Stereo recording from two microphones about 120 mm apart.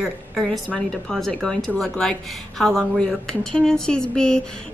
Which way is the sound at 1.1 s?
5° left (ahead or behind).